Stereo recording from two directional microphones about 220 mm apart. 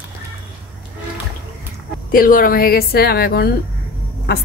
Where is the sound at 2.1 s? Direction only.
40° left (ahead or behind).